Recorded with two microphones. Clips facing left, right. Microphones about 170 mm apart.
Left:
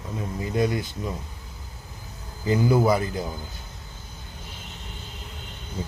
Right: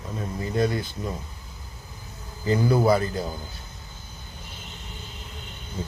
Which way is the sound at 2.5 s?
20° left (ahead or behind).